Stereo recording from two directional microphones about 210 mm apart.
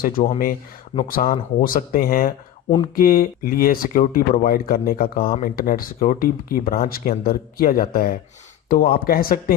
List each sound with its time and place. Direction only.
0.2 s speech: 35° left (ahead or behind)